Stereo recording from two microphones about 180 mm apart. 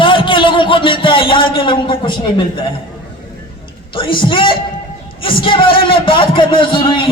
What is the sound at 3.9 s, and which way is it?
A man's voice, 30° left (ahead or behind).